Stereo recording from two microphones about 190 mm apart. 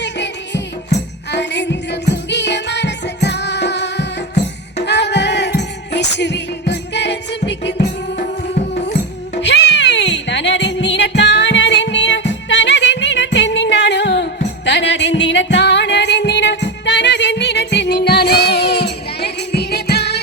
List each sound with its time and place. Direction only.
0.0 s music: 65° left (ahead or behind)